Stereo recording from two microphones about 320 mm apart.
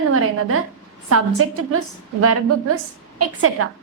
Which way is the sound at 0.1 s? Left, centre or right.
Right.